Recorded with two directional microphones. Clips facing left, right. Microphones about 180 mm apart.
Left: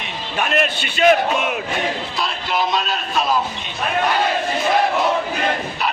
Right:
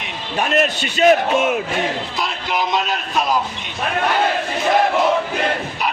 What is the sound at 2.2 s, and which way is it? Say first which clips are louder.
A man's voice: left 1 dB; 15° right (ahead or behind).